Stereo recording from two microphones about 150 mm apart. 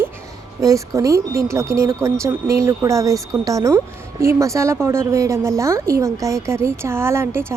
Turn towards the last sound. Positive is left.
turn(degrees=-15)  # may be behind; listen again after turning